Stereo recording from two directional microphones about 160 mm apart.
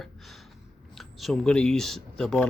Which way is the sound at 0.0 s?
Centre (ahead or behind).